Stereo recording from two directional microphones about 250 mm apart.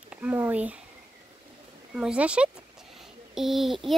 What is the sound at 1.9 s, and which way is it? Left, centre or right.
Speech, centre.